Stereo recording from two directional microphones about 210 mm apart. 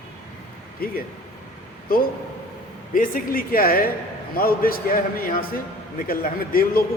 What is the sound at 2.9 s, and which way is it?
A man's voice, 40° left (ahead or behind).